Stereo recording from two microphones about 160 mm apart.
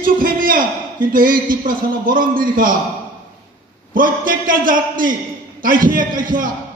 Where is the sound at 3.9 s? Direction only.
60° right (ahead or behind).